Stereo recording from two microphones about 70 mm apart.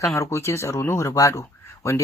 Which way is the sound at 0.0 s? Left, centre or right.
Left.